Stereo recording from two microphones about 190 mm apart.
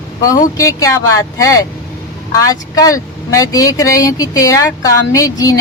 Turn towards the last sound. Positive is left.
turn(degrees=20)  # may be behind; listen again after turning